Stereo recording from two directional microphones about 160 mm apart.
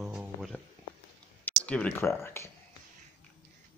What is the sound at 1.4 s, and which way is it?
Speech, 10° left (ahead or behind).